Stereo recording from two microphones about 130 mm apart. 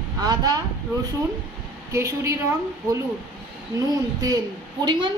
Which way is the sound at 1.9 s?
20° right (ahead or behind).